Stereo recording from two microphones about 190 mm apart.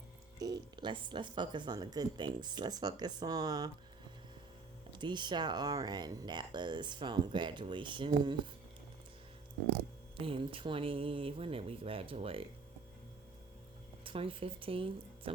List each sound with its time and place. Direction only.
0.3 s speech: 20° right (ahead or behind)
4.9 s speech: 25° right (ahead or behind)
10.2 s speech: 30° right (ahead or behind)
14.0 s speech: 30° right (ahead or behind)